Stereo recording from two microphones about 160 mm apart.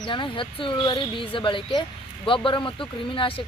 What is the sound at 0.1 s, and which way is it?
Speech, 30° left (ahead or behind).